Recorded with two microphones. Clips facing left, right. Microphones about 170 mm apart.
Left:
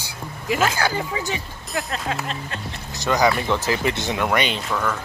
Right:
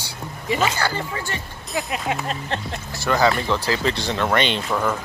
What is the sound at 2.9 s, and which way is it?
Speech, 15° left (ahead or behind).